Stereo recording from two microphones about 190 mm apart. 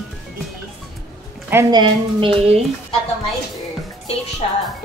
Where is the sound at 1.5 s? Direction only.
15° right (ahead or behind).